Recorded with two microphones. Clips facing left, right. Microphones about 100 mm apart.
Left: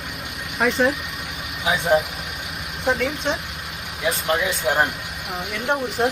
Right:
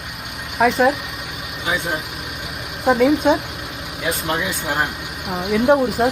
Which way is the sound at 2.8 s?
5° right (ahead or behind).